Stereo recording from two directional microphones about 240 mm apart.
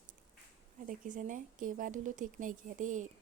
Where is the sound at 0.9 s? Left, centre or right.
Right.